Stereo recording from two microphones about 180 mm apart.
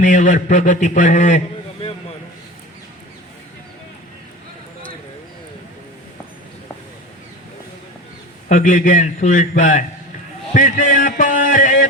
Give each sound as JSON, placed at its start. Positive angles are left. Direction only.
{"t": 0.0, "sound": "a man's voice", "side_deg": 45}
{"t": 8.4, "sound": "a man's voice", "side_deg": 45}